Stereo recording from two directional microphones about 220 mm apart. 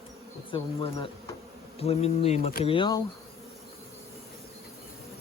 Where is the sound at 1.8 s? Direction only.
30° left (ahead or behind).